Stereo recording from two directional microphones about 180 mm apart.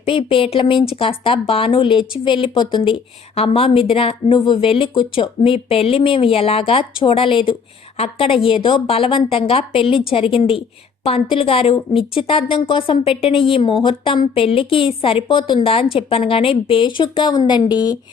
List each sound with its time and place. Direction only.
0.0 s a woman's voice: 30° left (ahead or behind)